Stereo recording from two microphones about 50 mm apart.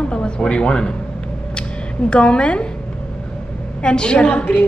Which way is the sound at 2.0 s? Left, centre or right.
Centre.